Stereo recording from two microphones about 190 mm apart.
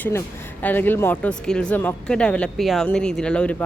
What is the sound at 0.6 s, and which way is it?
Speech, 10° left (ahead or behind).